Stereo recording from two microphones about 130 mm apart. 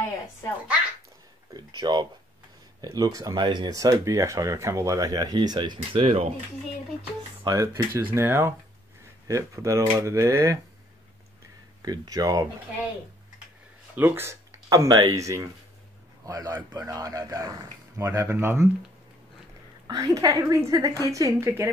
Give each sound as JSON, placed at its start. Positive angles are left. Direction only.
{"t": 1.6, "sound": "speech", "side_deg": -35}
{"t": 5.8, "sound": "speech", "side_deg": -50}
{"t": 7.4, "sound": "speech", "side_deg": -25}
{"t": 11.8, "sound": "speech", "side_deg": -30}
{"t": 13.9, "sound": "speech", "side_deg": -15}
{"t": 19.9, "sound": "speech", "side_deg": -30}